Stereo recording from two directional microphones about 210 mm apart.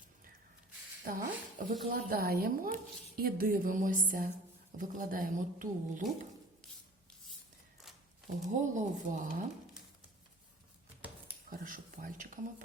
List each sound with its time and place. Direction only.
1.0 s a woman's voice: 40° right (ahead or behind)
8.4 s speech: 35° right (ahead or behind)
11.4 s speech: 40° right (ahead or behind)